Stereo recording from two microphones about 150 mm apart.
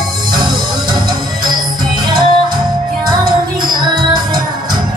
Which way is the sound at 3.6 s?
30° right (ahead or behind).